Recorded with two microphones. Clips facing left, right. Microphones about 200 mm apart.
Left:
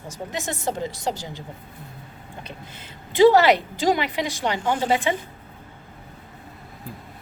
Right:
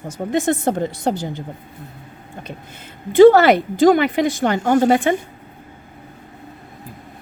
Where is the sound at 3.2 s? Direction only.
50° right (ahead or behind).